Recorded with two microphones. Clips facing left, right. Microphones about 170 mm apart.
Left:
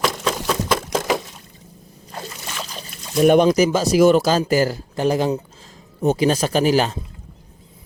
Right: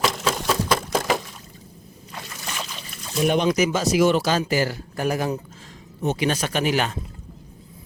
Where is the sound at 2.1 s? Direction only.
35° left (ahead or behind).